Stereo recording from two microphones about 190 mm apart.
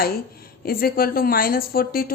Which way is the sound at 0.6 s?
50° left (ahead or behind).